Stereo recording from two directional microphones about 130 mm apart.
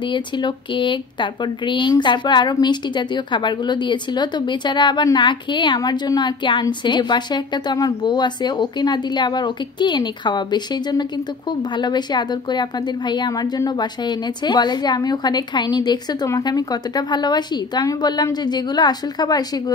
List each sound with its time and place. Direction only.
0.1 s a woman's voice: 35° left (ahead or behind)